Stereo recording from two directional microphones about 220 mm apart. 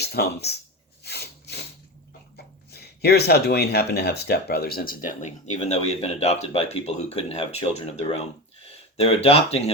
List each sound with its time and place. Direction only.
0.0 s speech: 45° left (ahead or behind)
1.0 s a sound: 50° left (ahead or behind)
2.3 s speech: 45° left (ahead or behind)
5.0 s speech: 35° left (ahead or behind)